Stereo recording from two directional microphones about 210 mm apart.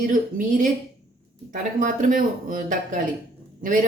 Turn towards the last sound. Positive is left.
turn(degrees=-40)  # may be behind; listen again after turning